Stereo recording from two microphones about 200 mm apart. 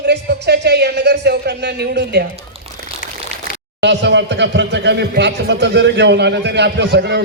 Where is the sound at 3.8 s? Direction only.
60° right (ahead or behind).